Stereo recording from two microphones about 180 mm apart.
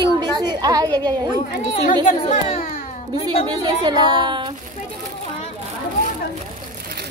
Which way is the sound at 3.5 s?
25° right (ahead or behind).